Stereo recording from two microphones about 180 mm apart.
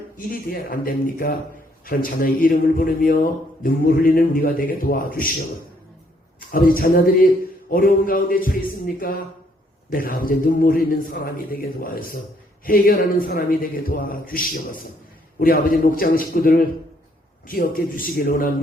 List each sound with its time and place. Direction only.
0.3 s a man's voice: 55° left (ahead or behind)
6.5 s a man's voice: 50° left (ahead or behind)